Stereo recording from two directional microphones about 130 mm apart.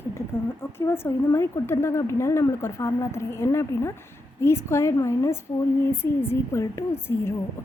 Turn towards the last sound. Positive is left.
turn(degrees=20)  # may be behind; listen again after turning